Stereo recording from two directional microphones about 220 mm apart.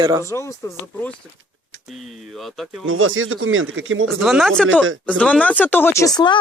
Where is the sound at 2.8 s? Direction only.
65° right (ahead or behind).